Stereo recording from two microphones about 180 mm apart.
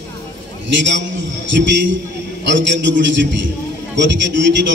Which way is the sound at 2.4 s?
90° right.